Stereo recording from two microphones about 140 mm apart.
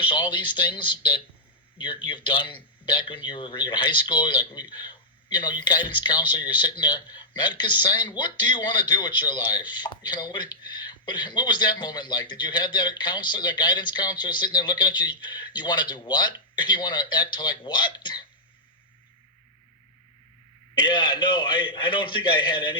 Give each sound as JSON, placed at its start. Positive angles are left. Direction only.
{"t": 0.0, "sound": "a man's voice", "side_deg": 35}
{"t": 20.7, "sound": "a man's voice", "side_deg": 35}